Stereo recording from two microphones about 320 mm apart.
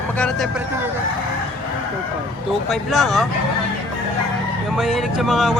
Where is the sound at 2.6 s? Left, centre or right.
Centre.